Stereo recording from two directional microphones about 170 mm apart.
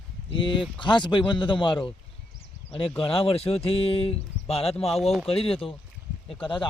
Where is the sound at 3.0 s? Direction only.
35° left (ahead or behind).